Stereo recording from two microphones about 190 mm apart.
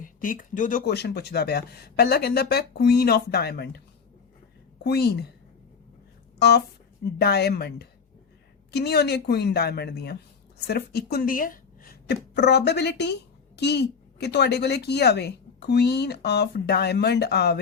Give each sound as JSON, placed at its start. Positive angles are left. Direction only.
{"t": 0.0, "sound": "a woman's voice", "side_deg": 45}
{"t": 4.8, "sound": "a woman's voice", "side_deg": 55}
{"t": 7.0, "sound": "a woman's voice", "side_deg": 55}